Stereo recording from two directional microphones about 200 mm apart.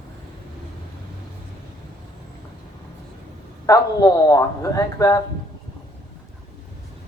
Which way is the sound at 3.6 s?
15° left (ahead or behind).